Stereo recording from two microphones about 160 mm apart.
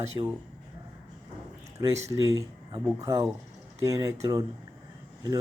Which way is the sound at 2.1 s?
20° right (ahead or behind).